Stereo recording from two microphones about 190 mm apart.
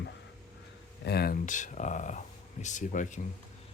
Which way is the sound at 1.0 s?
55° left (ahead or behind).